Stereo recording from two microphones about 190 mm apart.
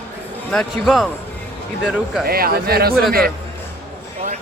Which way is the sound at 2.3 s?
50° right (ahead or behind).